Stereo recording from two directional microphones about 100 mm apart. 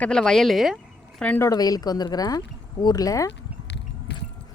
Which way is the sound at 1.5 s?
40° left (ahead or behind).